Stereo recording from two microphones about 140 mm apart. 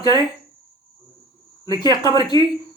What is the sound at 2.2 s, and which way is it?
Speech, 30° left (ahead or behind).